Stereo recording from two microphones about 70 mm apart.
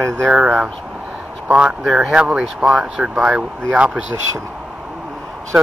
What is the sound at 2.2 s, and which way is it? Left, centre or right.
A man's voice, centre.